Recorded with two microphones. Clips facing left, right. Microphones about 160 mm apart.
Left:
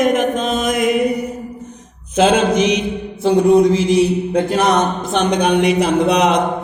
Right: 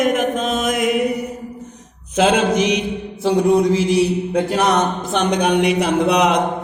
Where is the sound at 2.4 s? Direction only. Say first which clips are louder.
Left 2 dB; 10° right (ahead or behind).